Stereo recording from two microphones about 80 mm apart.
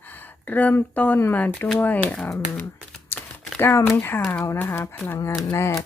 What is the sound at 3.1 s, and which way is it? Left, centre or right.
Typing, left.